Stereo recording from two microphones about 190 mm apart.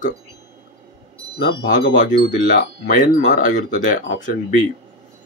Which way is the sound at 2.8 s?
45° left (ahead or behind).